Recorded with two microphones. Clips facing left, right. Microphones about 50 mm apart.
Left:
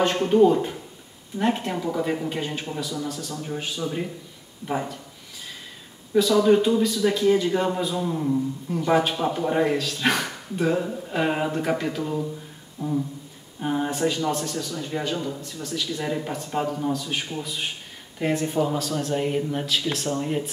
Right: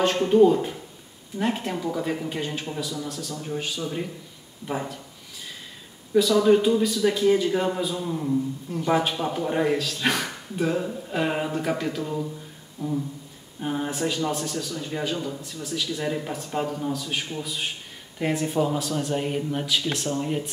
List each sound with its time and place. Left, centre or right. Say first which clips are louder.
0.0 s speech: even; centre
6.1 s speech: even; centre
12.8 s a sound: left 1 dB; centre
13.6 s speech: left 3 dB; centre